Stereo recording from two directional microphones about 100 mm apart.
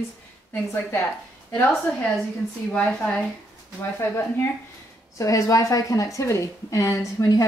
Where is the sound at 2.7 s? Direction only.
10° left (ahead or behind).